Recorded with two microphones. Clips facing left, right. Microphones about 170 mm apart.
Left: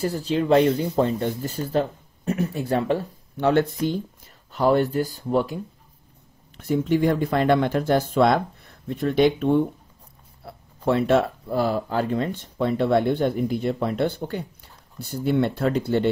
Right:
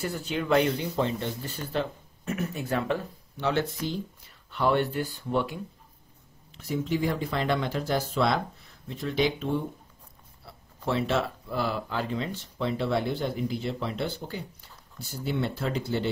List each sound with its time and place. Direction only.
0.0 s speech: 35° left (ahead or behind)
0.7 s speech: 50° left (ahead or behind)
3.3 s speech: 55° left (ahead or behind)
4.5 s speech: 40° left (ahead or behind)
6.5 s speech: 55° left (ahead or behind)